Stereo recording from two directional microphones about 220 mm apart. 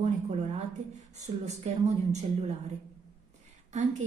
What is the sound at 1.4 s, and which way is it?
Speech, 30° right (ahead or behind).